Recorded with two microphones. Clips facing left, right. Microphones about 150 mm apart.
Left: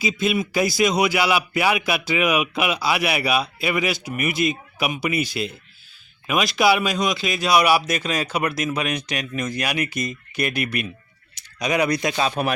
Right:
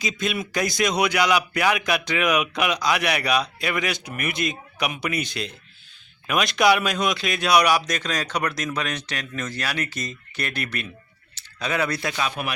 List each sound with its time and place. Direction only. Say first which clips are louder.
0.0 s a man's voice: left 5 dB; 5° left (ahead or behind)
12.1 s speech: left 5 dB; 30° left (ahead or behind)